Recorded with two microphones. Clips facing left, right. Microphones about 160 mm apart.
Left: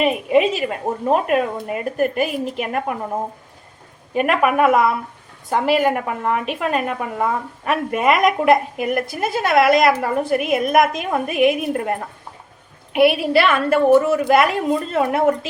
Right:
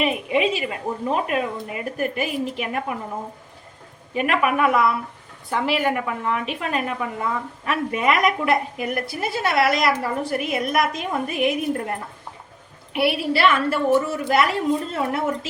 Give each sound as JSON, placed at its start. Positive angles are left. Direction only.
{"t": 0.3, "sound": "a woman's voice", "side_deg": 50}
{"t": 4.1, "sound": "a woman's voice", "side_deg": 45}